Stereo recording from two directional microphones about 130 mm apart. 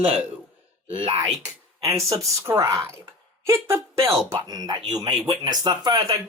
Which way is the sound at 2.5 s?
25° right (ahead or behind).